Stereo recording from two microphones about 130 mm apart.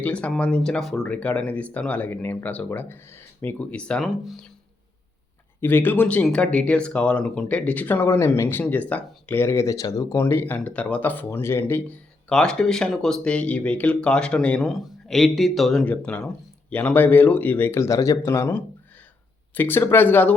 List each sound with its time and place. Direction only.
0.0 s speech: 10° left (ahead or behind)
5.5 s speech: 15° left (ahead or behind)
10.2 s speech: 20° left (ahead or behind)